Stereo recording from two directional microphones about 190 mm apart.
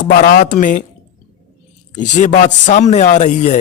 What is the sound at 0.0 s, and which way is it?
Speech, 45° left (ahead or behind).